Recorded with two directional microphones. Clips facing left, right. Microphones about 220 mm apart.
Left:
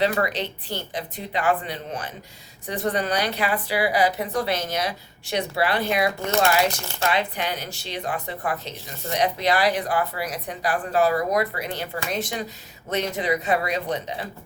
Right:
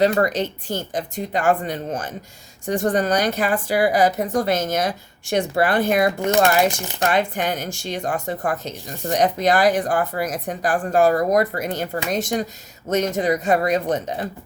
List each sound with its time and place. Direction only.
0.0 s speech: 45° right (ahead or behind)